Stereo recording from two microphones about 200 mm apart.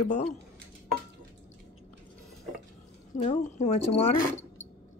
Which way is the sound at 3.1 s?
35° left (ahead or behind).